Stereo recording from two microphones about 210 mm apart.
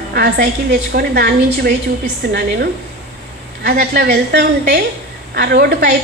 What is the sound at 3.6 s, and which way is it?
A woman's voice, 50° right (ahead or behind).